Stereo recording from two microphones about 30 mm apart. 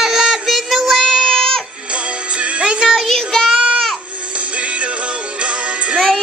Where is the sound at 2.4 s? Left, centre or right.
Right.